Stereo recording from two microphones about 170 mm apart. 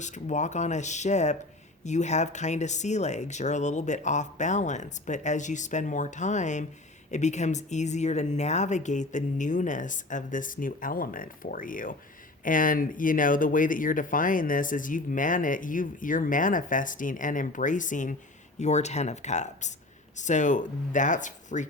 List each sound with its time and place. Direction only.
0.0 s speech: 45° left (ahead or behind)